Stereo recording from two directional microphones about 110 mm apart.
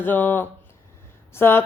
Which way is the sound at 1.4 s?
20° left (ahead or behind).